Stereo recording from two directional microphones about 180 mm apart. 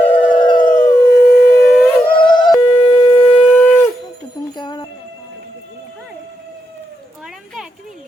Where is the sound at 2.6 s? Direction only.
25° left (ahead or behind).